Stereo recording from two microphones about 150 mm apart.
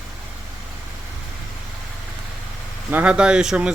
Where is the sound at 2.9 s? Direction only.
10° right (ahead or behind).